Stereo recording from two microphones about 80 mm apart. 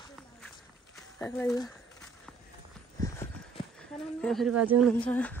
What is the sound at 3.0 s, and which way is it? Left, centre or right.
Clip-clop, left.